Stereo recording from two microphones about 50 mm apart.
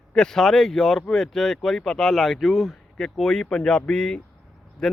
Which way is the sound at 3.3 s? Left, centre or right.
Centre.